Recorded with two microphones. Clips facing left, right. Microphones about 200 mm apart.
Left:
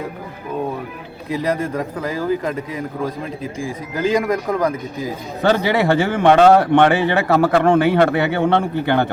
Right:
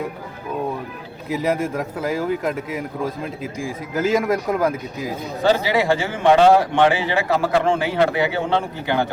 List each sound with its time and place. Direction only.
1.3 s speech: 5° right (ahead or behind)
5.4 s a man's voice: 60° left (ahead or behind)